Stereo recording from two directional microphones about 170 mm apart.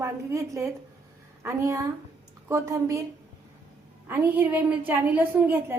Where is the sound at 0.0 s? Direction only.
15° right (ahead or behind).